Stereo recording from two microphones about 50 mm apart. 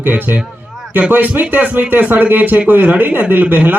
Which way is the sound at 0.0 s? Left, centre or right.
Right.